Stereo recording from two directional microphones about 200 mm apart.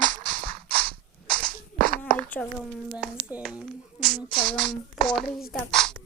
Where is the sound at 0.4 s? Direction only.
5° left (ahead or behind).